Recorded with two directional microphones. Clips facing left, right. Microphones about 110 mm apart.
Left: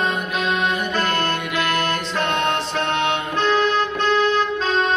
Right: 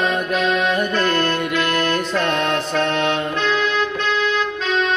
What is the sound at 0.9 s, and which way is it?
Music, 40° left (ahead or behind).